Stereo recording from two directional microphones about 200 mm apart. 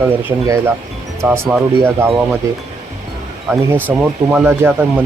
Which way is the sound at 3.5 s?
10° right (ahead or behind).